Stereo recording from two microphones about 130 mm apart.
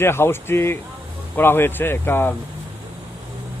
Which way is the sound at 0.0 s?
20° left (ahead or behind).